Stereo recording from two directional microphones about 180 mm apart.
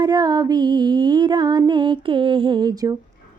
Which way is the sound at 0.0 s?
20° right (ahead or behind).